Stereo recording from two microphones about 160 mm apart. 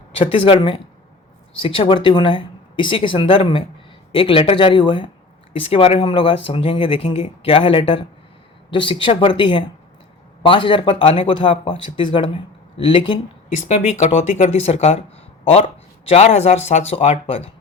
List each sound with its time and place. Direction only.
0.3 s speech: 35° left (ahead or behind)
13.6 s speech: 50° left (ahead or behind)
16.0 s speech: 45° left (ahead or behind)